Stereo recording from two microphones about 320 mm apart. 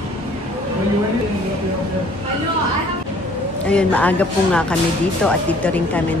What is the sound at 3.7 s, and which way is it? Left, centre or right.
Speech, centre.